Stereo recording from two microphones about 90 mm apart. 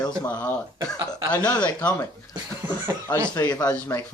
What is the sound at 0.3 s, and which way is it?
Speech, 15° left (ahead or behind).